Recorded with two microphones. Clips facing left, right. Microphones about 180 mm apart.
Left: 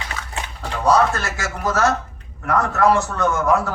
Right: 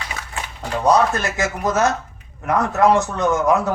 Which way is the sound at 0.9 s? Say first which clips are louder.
Right 1 dB; 20° right (ahead or behind).